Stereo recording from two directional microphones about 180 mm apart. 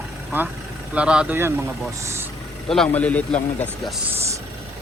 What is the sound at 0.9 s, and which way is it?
Speech, 5° right (ahead or behind).